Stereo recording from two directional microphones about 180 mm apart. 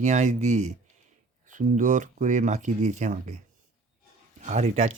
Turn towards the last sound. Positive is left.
turn(degrees=-40)  # may be behind; listen again after turning